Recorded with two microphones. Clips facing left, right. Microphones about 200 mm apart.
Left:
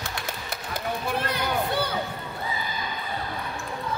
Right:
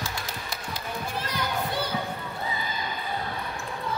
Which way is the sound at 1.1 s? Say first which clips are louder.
Left 3 dB; 60° left (ahead or behind).